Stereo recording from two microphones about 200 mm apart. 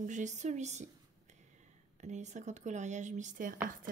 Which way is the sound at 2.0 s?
35° right (ahead or behind).